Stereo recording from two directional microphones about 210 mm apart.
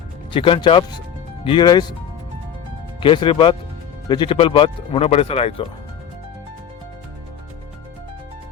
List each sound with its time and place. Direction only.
0.3 s speech: 25° left (ahead or behind)
3.0 s speech: 25° left (ahead or behind)